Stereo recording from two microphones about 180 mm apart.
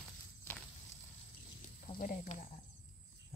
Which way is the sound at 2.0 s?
50° left (ahead or behind).